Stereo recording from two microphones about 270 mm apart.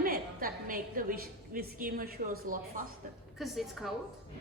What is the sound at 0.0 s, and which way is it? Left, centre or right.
A woman's voice, right.